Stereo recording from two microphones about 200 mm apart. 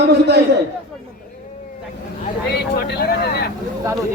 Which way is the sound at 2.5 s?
55° left (ahead or behind).